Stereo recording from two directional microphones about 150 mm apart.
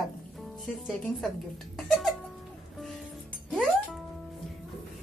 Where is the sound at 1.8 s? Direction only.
Centre (ahead or behind).